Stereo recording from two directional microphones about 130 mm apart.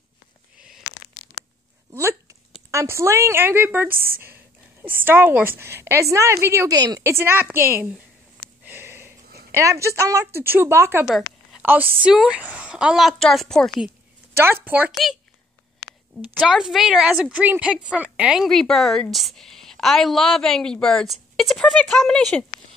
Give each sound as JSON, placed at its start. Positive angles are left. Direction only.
{"t": 0.6, "sound": "a sound", "side_deg": -5}
{"t": 1.9, "sound": "a sound", "side_deg": -20}
{"t": 2.7, "sound": "a woman's voice", "side_deg": -20}
{"t": 14.3, "sound": "speech", "side_deg": -15}
{"t": 14.9, "sound": "a woman's voice", "side_deg": 0}
{"t": 16.3, "sound": "a woman's voice", "side_deg": 0}